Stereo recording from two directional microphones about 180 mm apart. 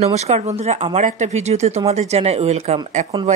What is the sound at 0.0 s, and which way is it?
Speech, 35° right (ahead or behind).